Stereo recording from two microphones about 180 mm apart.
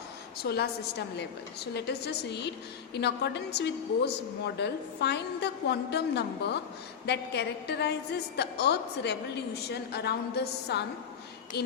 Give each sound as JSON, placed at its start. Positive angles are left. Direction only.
{"t": 0.4, "sound": "a woman's voice", "side_deg": 65}